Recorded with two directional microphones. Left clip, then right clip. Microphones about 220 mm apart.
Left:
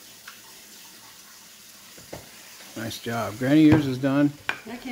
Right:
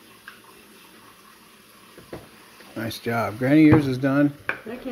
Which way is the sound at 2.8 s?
5° left (ahead or behind).